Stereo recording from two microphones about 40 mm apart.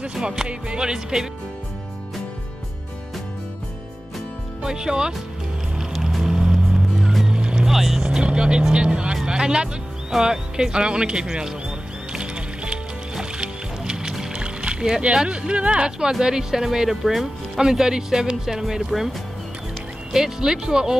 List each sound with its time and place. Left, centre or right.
0.1 s speech: centre
4.6 s speech: centre
6.2 s music: centre
7.2 s boat: right
7.6 s speech: centre
8.0 s speech: right
12.1 s music: right
15.2 s speech: right